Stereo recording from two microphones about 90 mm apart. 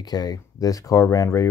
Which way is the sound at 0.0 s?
45° left (ahead or behind).